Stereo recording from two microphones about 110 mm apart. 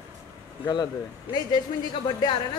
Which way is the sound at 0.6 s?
40° left (ahead or behind).